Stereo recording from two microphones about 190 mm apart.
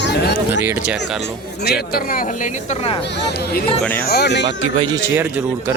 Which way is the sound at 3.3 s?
55° left (ahead or behind).